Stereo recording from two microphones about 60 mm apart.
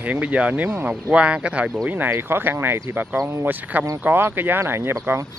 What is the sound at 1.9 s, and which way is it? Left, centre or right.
Speech, right.